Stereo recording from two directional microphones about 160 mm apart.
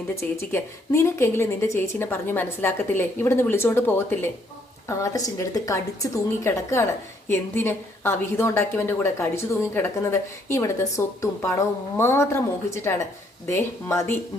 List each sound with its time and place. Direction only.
0.3 s a woman's voice: 15° left (ahead or behind)